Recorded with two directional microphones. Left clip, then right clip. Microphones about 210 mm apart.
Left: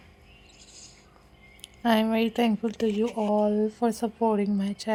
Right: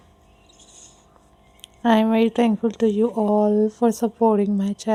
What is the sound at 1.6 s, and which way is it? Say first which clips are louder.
Speech: right 5 dB; 35° right (ahead or behind).